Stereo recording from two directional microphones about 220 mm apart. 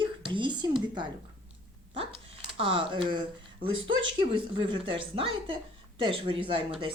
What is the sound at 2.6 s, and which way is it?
A woman's voice, 25° right (ahead or behind).